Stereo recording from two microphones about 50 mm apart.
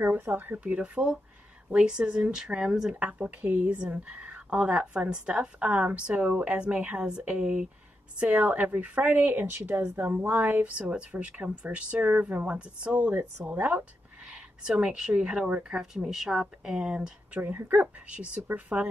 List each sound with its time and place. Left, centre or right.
0.1 s a woman's voice: right
0.7 s a woman's voice: centre
3.0 s a woman's voice: right
12.1 s a woman's voice: right
12.4 s a woman's voice: right
14.8 s a woman's voice: centre
15.7 s speech: centre
17.4 s speech: right
18.1 s a woman's voice: right